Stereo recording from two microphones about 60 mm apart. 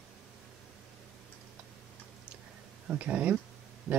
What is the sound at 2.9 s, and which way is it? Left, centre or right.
Speech, right.